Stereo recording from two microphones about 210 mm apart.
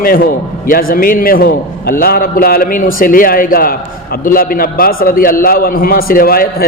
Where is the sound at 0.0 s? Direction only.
45° left (ahead or behind).